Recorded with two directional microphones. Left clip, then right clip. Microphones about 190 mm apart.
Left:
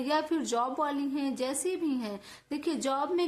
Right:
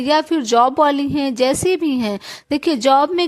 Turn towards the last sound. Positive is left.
turn(degrees=-45)  # may be behind; listen again after turning